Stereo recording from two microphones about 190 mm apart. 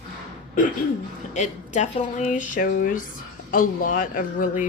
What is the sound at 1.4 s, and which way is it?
Speech, 40° left (ahead or behind).